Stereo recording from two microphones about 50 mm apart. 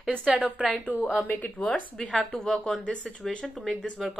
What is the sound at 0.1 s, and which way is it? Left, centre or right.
Speech, right.